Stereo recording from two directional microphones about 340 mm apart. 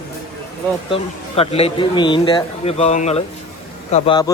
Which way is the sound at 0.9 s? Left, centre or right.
Centre.